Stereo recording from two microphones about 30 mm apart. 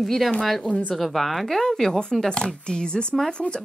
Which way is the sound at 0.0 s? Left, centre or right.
Centre.